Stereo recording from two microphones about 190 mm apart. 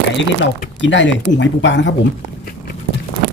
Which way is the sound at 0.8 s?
75° left (ahead or behind).